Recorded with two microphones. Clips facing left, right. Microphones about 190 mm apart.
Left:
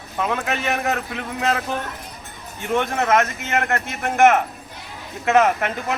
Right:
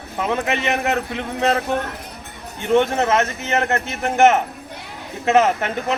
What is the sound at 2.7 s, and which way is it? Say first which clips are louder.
Speech: right 3 dB; 25° right (ahead or behind).